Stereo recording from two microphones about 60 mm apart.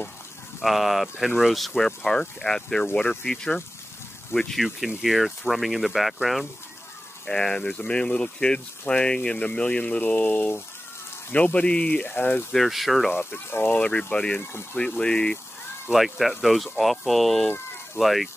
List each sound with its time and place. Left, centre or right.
0.6 s speech: centre
4.3 s speech: centre
4.6 s speech: centre
7.2 s speech: centre; by 10.6 s left
11.3 s speech: left
12.5 s speech: centre
13.1 s speech: left
15.9 s speech: centre